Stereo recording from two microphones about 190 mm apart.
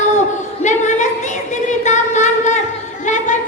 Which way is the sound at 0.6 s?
40° left (ahead or behind).